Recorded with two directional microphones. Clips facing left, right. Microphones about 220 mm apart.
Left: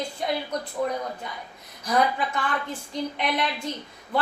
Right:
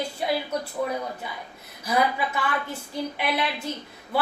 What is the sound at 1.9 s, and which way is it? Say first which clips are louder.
A woman's voice: even; 5° right (ahead or behind).